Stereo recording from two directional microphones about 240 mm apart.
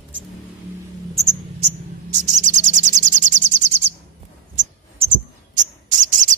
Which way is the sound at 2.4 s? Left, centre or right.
Right.